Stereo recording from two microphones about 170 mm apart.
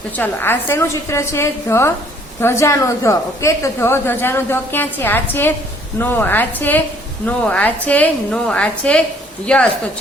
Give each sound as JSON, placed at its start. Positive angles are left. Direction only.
{"t": 0.2, "sound": "a woman's voice", "side_deg": 15}